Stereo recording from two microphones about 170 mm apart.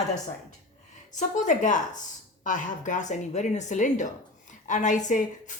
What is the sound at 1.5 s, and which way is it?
Speech, 50° left (ahead or behind).